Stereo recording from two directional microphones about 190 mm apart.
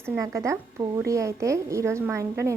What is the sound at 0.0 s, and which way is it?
A woman's voice, 15° right (ahead or behind).